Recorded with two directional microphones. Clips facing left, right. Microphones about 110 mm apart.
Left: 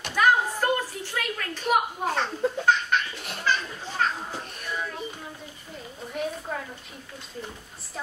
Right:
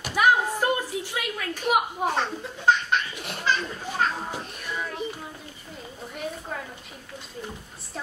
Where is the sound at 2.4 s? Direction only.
40° left (ahead or behind).